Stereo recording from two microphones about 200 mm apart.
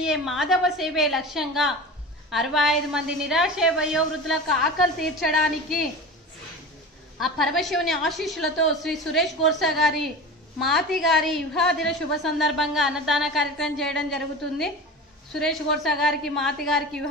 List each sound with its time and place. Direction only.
0.0 s a woman's voice: centre (ahead or behind)
7.2 s a woman's voice: centre (ahead or behind)